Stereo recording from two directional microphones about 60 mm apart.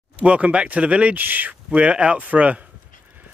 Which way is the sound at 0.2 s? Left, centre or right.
Centre.